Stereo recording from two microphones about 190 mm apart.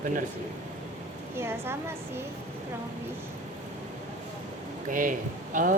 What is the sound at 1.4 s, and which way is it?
Speech, 15° right (ahead or behind).